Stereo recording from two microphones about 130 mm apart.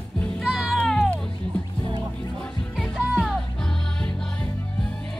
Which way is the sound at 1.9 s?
35° right (ahead or behind).